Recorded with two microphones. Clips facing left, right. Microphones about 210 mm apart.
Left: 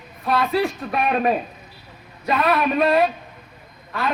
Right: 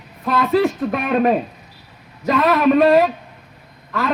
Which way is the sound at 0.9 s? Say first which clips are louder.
Right 1 dB; 75° right (ahead or behind).